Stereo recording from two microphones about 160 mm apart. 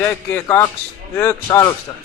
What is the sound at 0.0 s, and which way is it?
A man's voice, 15° left (ahead or behind).